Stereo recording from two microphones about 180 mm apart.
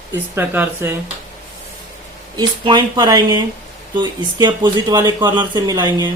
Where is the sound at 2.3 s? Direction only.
25° right (ahead or behind).